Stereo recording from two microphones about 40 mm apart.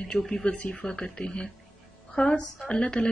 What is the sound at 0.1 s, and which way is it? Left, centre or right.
Speech, centre.